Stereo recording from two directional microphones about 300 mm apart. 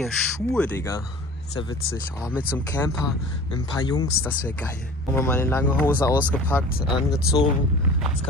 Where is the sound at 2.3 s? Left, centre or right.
Centre.